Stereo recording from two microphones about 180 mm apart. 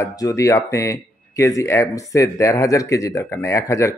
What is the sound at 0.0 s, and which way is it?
Speech, 20° left (ahead or behind).